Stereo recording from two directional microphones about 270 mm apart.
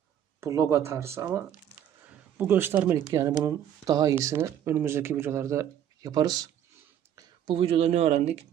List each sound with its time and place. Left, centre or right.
0.3 s speech: centre